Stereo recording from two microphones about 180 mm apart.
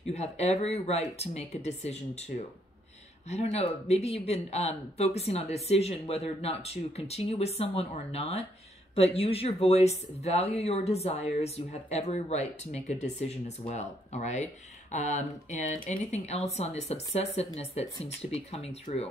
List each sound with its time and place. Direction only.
0.0 s speech: 35° left (ahead or behind)